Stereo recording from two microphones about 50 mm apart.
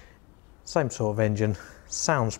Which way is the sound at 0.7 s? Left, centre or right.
Centre.